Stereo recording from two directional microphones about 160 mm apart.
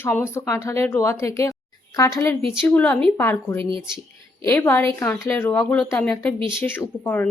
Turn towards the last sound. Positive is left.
turn(degrees=10)  # may be behind; listen again after turning